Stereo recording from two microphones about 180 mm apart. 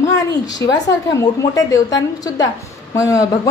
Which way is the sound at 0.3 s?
20° left (ahead or behind).